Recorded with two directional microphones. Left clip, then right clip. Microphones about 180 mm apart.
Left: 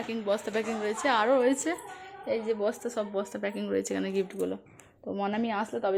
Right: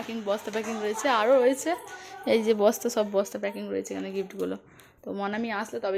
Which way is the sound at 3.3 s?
5° left (ahead or behind).